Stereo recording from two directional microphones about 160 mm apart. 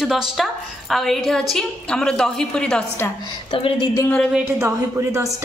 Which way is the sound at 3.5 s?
35° left (ahead or behind).